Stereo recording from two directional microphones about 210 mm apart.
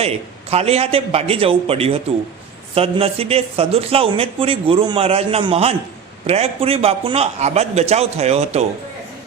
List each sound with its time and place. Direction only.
0.0 s a man's voice: 30° right (ahead or behind)